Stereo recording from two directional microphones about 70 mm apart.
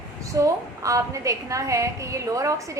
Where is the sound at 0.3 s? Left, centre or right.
Right.